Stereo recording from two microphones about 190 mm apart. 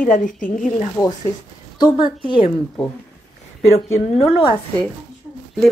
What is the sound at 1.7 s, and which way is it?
Speech, 25° left (ahead or behind).